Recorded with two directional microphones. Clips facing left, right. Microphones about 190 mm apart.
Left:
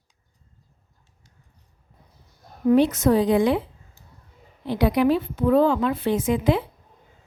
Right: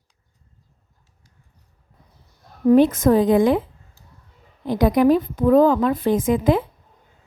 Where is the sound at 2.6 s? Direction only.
50° right (ahead or behind).